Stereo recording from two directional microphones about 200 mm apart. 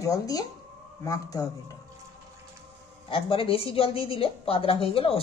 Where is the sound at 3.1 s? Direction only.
25° left (ahead or behind).